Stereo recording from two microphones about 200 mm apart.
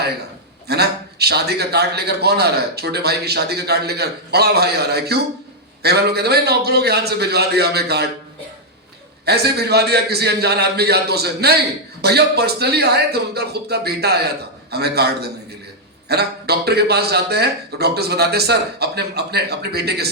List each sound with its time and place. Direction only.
0.7 s a man's voice: 55° right (ahead or behind)
9.2 s a man's voice: 55° right (ahead or behind)